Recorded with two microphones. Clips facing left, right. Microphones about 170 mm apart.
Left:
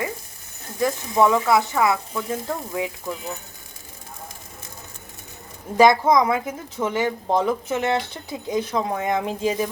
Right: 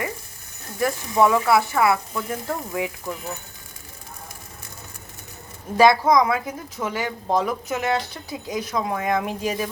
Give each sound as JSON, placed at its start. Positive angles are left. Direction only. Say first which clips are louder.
{"t": 0.8, "sound": "speech", "louder": "even", "side_deg": 20}
{"t": 3.1, "sound": "speech", "louder": "left 1 dB", "side_deg": -10}
{"t": 5.7, "sound": "speech", "louder": "even", "side_deg": 20}